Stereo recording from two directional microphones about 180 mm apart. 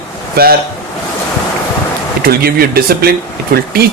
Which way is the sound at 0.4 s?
60° right (ahead or behind).